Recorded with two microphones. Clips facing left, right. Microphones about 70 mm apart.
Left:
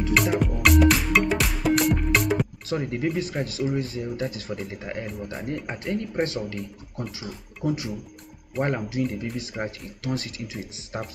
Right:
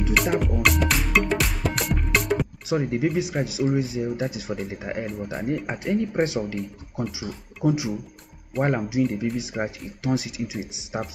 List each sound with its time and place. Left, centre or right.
0.1 s music: centre
2.7 s speech: centre
5.0 s speech: centre
5.7 s speech: centre